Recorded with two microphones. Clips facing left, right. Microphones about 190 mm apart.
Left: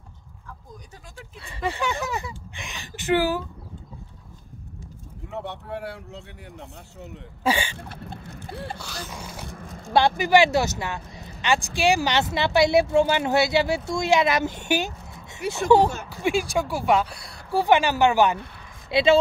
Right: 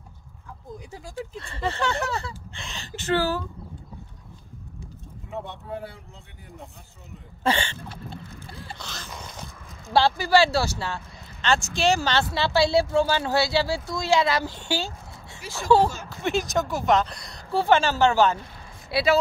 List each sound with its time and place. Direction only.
0.9 s speech: 30° right (ahead or behind)
1.4 s speech: 10° left (ahead or behind)
5.4 s a man's voice: 70° left (ahead or behind)
7.4 s speech: 10° left (ahead or behind)
7.9 s boat: 65° left (ahead or behind)
8.7 s speech: 10° left (ahead or behind)
9.6 s speech: 45° left (ahead or behind)
9.9 s speech: 20° left (ahead or behind)